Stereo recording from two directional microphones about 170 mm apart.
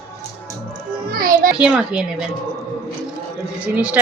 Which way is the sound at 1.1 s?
55° right (ahead or behind).